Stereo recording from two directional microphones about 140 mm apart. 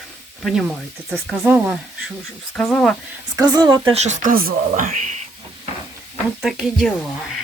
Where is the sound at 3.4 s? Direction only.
30° right (ahead or behind).